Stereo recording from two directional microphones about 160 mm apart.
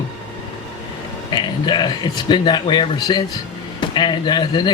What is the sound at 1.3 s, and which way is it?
Speech, 25° left (ahead or behind).